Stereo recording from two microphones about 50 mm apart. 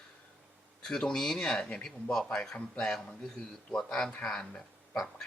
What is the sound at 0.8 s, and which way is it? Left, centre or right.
Speech, centre.